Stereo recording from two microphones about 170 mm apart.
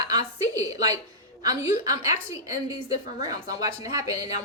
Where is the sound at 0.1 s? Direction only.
20° right (ahead or behind).